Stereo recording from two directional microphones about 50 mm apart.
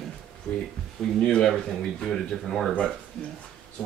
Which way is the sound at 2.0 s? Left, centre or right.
Centre.